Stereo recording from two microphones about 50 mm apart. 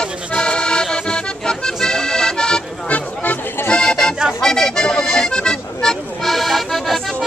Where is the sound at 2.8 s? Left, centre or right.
Left.